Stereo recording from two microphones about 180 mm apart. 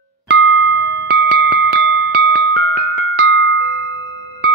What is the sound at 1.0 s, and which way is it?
Music, 85° right.